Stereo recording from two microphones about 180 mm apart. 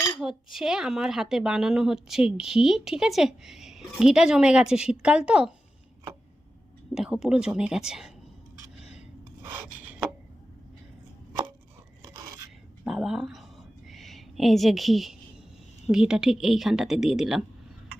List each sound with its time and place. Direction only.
0.0 s speech: centre (ahead or behind)
6.9 s speech: centre (ahead or behind)
8.8 s rub: 5° right (ahead or behind)
12.0 s a sound: 20° right (ahead or behind)
12.8 s a sound: centre (ahead or behind)
15.9 s speech: 5° right (ahead or behind)